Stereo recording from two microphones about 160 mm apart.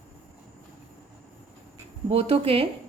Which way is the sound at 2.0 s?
40° right (ahead or behind).